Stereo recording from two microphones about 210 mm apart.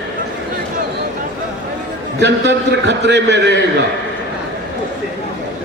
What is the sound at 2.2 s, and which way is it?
A man's voice, 55° right (ahead or behind).